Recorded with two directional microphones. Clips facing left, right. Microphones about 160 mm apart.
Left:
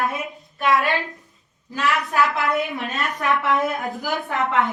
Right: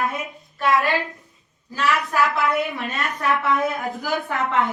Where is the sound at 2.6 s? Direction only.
20° left (ahead or behind).